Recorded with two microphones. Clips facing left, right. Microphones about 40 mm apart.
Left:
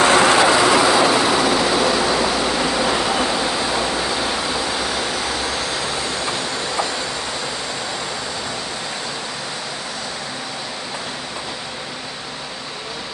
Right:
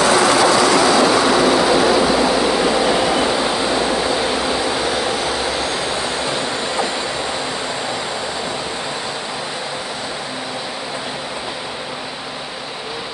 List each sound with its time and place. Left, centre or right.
0.0 s vehicle: left
0.3 s vehicle: left
0.8 s vehicle: centre